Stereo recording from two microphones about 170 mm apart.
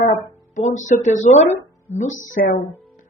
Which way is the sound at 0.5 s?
45° left (ahead or behind).